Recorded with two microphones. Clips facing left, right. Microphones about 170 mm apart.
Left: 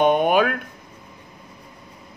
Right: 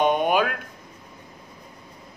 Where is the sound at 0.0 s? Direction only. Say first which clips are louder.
Left 3 dB; 50° left (ahead or behind).